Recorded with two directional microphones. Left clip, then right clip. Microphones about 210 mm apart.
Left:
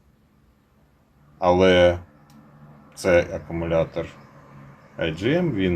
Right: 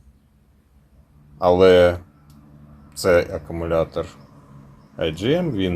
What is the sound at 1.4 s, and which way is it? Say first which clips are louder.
Speech: right 3 dB; 30° right (ahead or behind).